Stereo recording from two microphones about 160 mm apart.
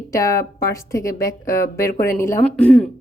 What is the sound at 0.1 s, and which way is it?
A woman's voice, 20° left (ahead or behind).